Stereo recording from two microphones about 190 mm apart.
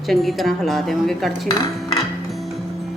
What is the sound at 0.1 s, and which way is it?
Speech, centre (ahead or behind).